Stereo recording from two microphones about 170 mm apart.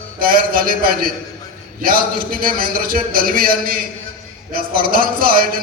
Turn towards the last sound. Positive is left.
turn(degrees=-60)  # may be behind; listen again after turning